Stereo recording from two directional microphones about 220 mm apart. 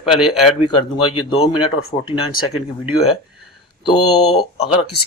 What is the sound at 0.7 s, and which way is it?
Speech, 20° left (ahead or behind).